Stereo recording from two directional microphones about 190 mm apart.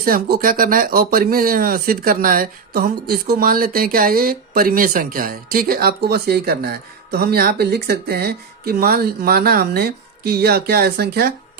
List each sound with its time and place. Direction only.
0.0 s speech: 50° right (ahead or behind)